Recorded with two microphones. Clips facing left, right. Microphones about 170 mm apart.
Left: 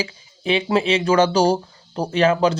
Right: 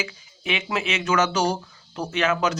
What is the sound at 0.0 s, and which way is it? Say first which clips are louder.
Speech: left 6 dB; 30° left (ahead or behind).